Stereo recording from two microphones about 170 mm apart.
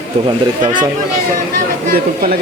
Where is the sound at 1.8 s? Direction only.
55° right (ahead or behind).